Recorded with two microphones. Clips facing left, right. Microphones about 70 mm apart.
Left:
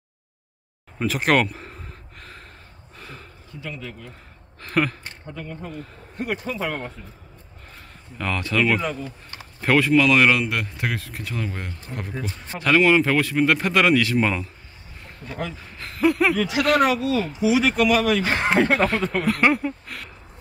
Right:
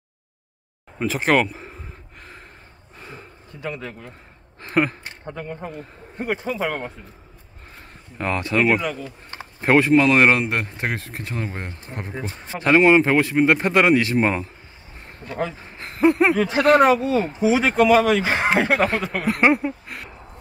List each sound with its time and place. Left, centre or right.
0.9 s speech: centre
3.0 s a sound: centre
3.6 s a man's voice: right
4.6 s speech: right
5.2 s speech: right
6.5 s speech: centre
8.2 s speech: right
18.5 s speech: centre